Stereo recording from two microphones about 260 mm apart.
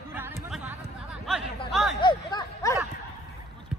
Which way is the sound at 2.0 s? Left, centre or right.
Centre.